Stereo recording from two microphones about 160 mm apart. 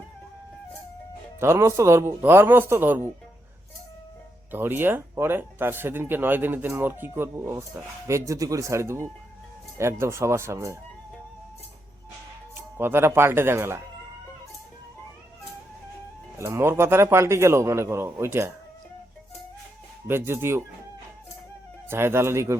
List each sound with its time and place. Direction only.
1.4 s speech: 15° right (ahead or behind)
4.5 s speech: 15° right (ahead or behind)
12.5 s speech: 15° right (ahead or behind)
16.4 s speech: 15° right (ahead or behind)
20.1 s speech: 15° right (ahead or behind)
21.8 s speech: 15° right (ahead or behind)